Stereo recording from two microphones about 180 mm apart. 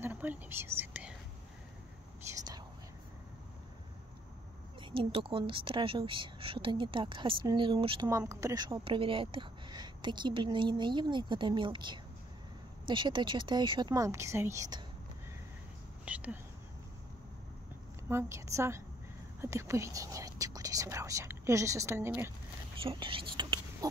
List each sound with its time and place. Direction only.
0.0 s whispering: 10° right (ahead or behind)
2.2 s speech: 20° right (ahead or behind)
4.9 s speech: 30° right (ahead or behind)
8.1 s speech: 15° right (ahead or behind)
16.1 s speech: 10° right (ahead or behind)
18.0 s speech: 15° right (ahead or behind)
22.8 s speech: 30° right (ahead or behind)